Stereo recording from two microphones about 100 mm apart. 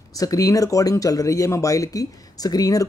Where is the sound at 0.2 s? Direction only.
35° left (ahead or behind).